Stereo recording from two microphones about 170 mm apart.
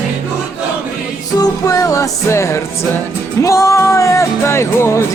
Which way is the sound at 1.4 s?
20° left (ahead or behind).